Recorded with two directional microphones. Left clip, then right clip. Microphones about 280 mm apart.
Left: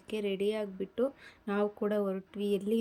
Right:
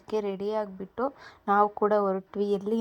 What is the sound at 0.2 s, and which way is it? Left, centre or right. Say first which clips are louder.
A woman's voice: right 2 dB; right.